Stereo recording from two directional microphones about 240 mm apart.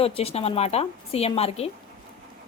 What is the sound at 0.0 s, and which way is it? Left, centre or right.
A woman's voice, left.